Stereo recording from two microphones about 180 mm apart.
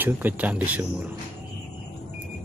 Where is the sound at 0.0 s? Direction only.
10° right (ahead or behind).